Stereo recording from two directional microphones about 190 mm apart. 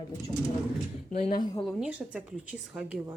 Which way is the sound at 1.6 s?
Centre (ahead or behind).